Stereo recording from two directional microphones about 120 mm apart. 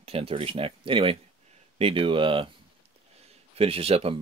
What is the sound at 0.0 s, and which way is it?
Speech, 55° right (ahead or behind).